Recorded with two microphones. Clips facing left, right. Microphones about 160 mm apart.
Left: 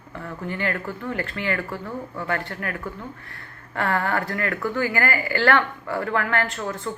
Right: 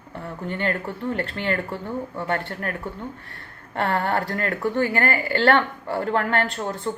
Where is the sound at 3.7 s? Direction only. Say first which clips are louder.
Right 1 dB; 30° right (ahead or behind).